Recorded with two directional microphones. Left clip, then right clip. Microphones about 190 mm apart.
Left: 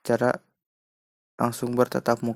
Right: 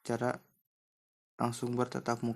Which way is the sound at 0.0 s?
35° left (ahead or behind).